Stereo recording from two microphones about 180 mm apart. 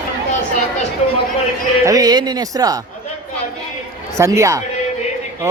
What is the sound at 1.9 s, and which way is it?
Speech, 20° right (ahead or behind).